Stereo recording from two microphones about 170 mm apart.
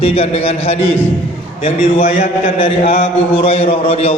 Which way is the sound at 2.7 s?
35° left (ahead or behind).